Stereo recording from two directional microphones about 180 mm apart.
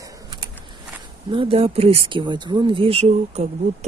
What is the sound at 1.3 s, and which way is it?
Speech, 30° right (ahead or behind).